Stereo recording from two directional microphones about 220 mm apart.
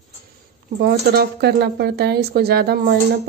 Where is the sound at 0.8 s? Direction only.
45° right (ahead or behind).